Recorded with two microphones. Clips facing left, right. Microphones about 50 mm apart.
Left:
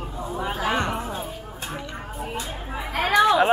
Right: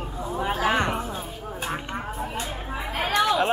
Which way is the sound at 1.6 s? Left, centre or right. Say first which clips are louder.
Right 3 dB; right.